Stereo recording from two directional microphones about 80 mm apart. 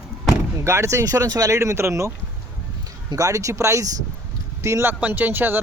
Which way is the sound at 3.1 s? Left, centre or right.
Right.